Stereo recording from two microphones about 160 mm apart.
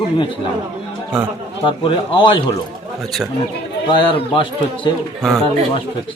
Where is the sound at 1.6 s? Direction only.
30° left (ahead or behind).